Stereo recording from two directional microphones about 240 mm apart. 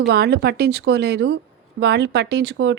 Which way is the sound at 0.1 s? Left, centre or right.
Right.